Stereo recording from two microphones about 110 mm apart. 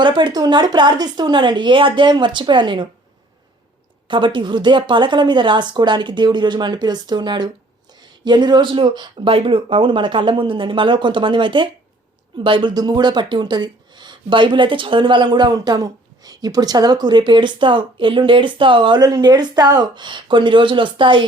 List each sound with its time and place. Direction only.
0.0 s speech: 45° right (ahead or behind)
4.1 s speech: 45° right (ahead or behind)
19.0 s speech: 35° right (ahead or behind)